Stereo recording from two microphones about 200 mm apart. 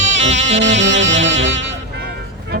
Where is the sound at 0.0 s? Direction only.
65° right (ahead or behind).